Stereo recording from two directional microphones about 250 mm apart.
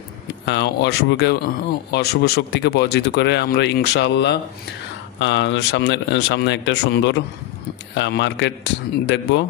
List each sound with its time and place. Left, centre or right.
0.5 s speech: left